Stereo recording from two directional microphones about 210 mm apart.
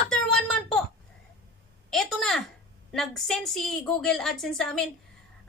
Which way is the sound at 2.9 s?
Centre (ahead or behind).